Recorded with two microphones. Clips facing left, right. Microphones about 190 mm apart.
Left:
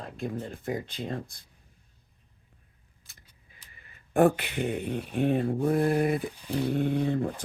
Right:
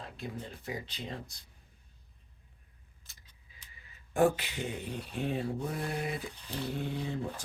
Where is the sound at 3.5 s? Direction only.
55° left (ahead or behind).